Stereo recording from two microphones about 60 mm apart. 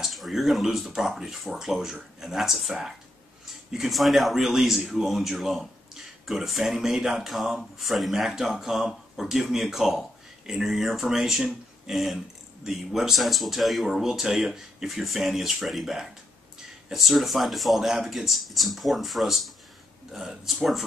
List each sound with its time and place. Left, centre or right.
0.0 s speech: centre